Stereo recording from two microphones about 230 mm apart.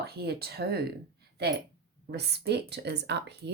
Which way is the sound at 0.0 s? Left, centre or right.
Right.